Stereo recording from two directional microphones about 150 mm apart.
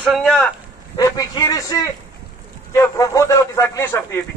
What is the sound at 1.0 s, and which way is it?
A man's voice, 25° left (ahead or behind).